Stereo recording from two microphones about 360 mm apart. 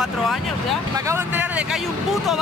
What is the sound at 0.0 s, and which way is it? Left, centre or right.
Speech, centre.